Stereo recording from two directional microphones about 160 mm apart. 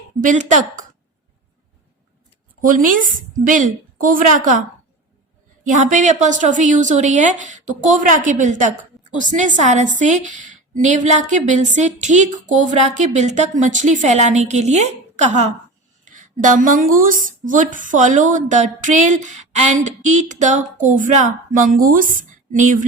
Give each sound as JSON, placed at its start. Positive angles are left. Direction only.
{"t": 0.2, "sound": "a woman's voice", "side_deg": -55}
{"t": 2.6, "sound": "a woman's voice", "side_deg": -55}
{"t": 5.6, "sound": "a woman's voice", "side_deg": -50}